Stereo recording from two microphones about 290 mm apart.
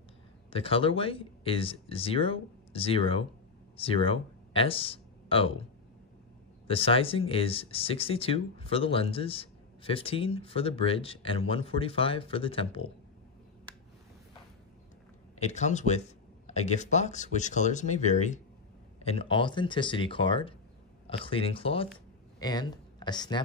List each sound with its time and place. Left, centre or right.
0.5 s speech: centre
6.7 s speech: centre
15.3 s speech: left